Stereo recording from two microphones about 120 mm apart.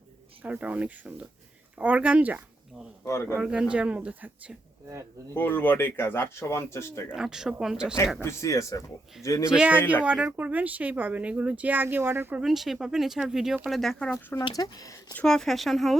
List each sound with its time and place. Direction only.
0.4 s speech: 10° right (ahead or behind)
3.0 s speech: 20° left (ahead or behind)
3.3 s speech: 10° right (ahead or behind)
5.3 s speech: 15° left (ahead or behind)
7.1 s speech: 5° right (ahead or behind)
8.2 s speech: 25° left (ahead or behind)
9.5 s speech: 10° right (ahead or behind)
12.4 s speech: centre (ahead or behind)
14.5 s speech: 30° left (ahead or behind)
15.1 s speech: 5° left (ahead or behind)